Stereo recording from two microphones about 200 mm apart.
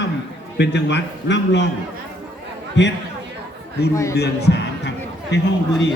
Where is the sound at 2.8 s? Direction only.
60° left (ahead or behind).